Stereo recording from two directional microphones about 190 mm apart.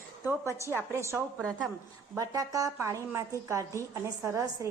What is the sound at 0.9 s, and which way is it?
A woman's voice, 15° right (ahead or behind).